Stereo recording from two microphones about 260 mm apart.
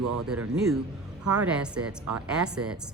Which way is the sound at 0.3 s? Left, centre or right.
Centre.